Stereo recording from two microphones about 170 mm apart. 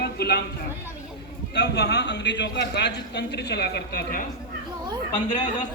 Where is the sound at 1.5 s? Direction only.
80° left.